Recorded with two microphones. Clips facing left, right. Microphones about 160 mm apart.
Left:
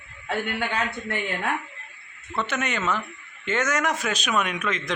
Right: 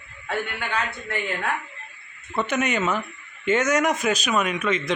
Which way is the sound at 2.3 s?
15° right (ahead or behind).